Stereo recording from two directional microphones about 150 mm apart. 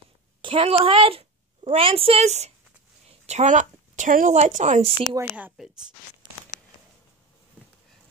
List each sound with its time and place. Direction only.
0.4 s a woman's voice: 35° right (ahead or behind)
5.3 s a woman's voice: 5° right (ahead or behind)